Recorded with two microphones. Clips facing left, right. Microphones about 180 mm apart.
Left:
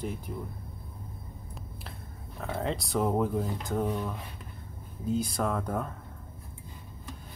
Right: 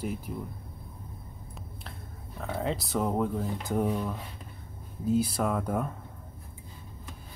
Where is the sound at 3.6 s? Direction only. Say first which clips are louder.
Right 2 dB; 10° right (ahead or behind).